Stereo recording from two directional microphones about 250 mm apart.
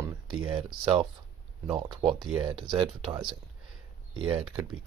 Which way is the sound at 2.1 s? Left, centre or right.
Centre.